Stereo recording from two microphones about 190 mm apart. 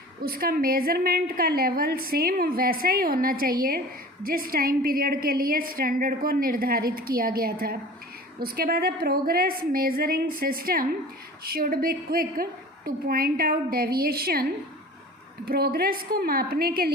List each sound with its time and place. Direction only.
0.2 s a woman's voice: 50° right (ahead or behind)
15.4 s a woman's voice: 55° right (ahead or behind)